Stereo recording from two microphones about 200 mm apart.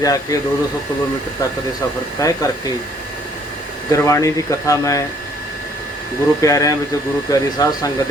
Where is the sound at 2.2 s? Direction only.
15° left (ahead or behind).